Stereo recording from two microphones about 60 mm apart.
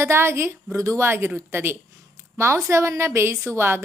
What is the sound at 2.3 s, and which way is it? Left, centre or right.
Speech, right.